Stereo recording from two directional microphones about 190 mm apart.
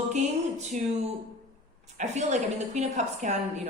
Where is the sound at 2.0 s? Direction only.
40° right (ahead or behind).